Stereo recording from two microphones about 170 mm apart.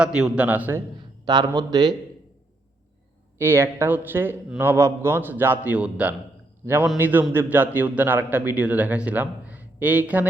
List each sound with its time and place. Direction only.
0.0 s a man's voice: 5° right (ahead or behind)
0.9 s a man's voice: 25° right (ahead or behind)
3.3 s a man's voice: 15° right (ahead or behind)